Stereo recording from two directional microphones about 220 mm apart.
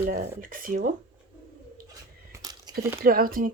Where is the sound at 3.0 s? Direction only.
40° right (ahead or behind).